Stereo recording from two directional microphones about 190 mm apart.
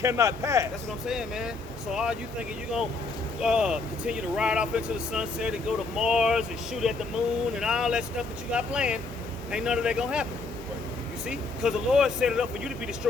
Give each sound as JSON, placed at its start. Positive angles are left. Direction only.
{"t": 0.0, "sound": "speech", "side_deg": -15}
{"t": 1.0, "sound": "speech", "side_deg": 0}
{"t": 3.4, "sound": "speech", "side_deg": -5}
{"t": 11.3, "sound": "speech", "side_deg": -5}